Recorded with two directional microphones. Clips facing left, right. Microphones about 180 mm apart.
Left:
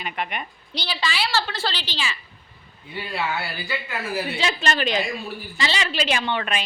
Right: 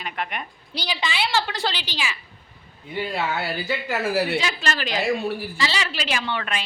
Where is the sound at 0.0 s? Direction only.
Centre (ahead or behind).